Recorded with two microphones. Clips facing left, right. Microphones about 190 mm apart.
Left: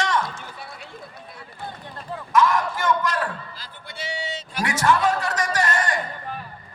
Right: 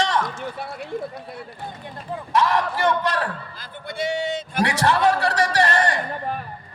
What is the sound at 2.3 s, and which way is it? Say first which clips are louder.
Speech: left 1 dB; 35° right (ahead or behind).